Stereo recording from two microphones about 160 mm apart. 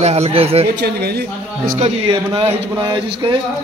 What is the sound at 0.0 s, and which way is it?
Speech, 40° right (ahead or behind).